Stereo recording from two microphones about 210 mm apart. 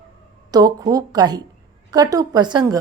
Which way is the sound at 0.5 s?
15° right (ahead or behind).